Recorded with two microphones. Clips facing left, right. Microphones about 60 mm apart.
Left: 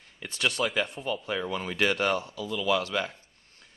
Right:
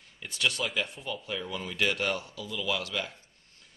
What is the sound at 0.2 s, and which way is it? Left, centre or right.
Speech, left.